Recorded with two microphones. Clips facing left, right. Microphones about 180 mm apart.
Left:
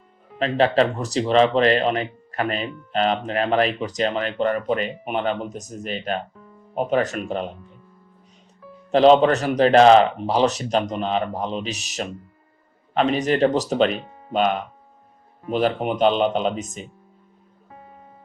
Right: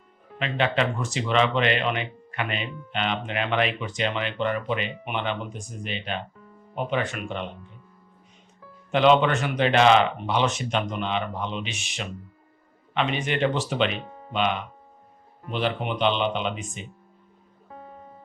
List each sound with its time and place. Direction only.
0.3 s speech: 35° left (ahead or behind)
8.9 s speech: 35° left (ahead or behind)